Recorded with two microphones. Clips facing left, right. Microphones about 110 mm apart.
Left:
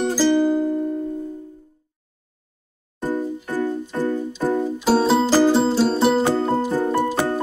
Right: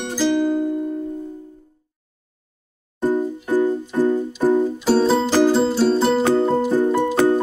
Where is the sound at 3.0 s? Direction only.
15° right (ahead or behind).